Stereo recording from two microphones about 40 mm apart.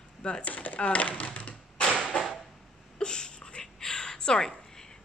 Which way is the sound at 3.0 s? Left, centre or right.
Left.